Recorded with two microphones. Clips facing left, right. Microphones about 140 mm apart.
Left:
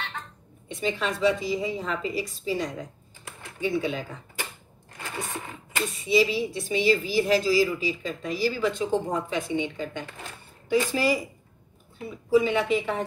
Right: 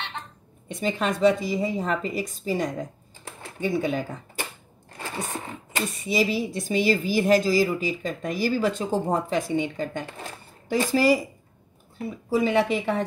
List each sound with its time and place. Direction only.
0.7 s a woman's voice: 45° right (ahead or behind)
4.9 s printer: 35° right (ahead or behind)
5.9 s a woman's voice: 45° right (ahead or behind)
12.3 s speech: 40° right (ahead or behind)